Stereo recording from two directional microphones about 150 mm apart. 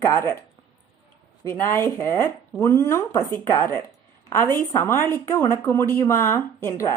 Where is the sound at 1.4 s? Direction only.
20° left (ahead or behind).